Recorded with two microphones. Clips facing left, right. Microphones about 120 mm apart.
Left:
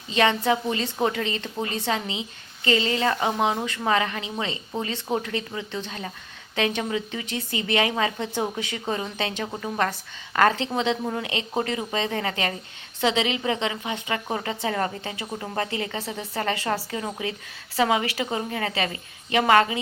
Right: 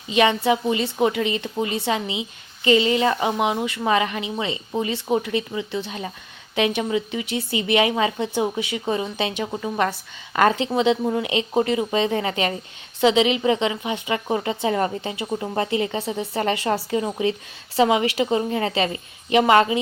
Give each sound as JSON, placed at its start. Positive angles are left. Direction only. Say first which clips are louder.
{"t": 0.1, "sound": "a woman's voice", "louder": "right 3 dB", "side_deg": -15}